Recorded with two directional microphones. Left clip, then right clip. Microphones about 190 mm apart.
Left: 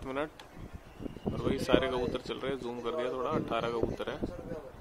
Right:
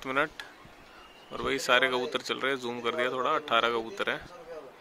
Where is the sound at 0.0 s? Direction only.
Centre (ahead or behind).